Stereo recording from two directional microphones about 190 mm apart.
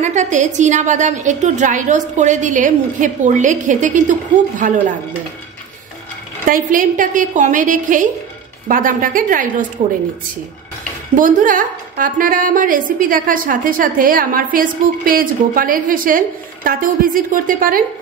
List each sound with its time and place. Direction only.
0.0 s a woman's voice: 40° right (ahead or behind)
6.4 s a woman's voice: 45° right (ahead or behind)
11.1 s a woman's voice: 45° right (ahead or behind)